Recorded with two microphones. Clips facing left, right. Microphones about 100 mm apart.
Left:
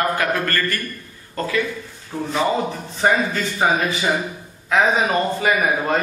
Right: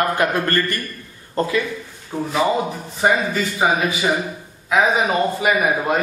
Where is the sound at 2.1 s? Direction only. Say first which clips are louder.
Right 1 dB; 15° right (ahead or behind).